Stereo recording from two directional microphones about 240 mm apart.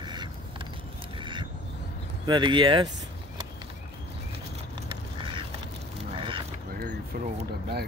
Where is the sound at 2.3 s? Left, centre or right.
Centre.